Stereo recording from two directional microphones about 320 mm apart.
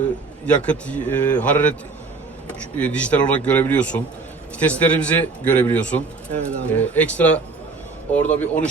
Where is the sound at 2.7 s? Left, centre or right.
Centre.